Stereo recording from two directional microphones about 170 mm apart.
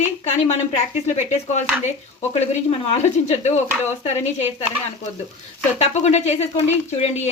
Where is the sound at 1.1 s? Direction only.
40° left (ahead or behind).